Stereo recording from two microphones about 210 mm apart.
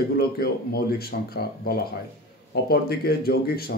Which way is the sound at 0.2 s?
50° left (ahead or behind).